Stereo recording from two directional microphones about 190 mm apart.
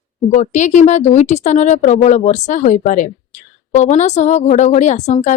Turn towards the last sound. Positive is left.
turn(degrees=35)  # may be behind; listen again after turning